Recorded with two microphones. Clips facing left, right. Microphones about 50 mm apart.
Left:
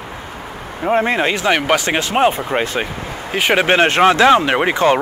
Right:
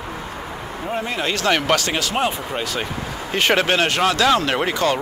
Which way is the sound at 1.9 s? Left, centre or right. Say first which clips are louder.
Left 6 dB; left.